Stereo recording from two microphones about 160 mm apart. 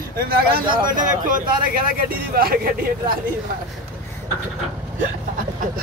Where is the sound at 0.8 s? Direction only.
55° right (ahead or behind).